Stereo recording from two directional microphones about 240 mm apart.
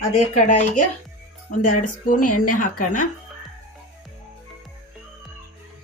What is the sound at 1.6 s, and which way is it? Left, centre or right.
Speech, left.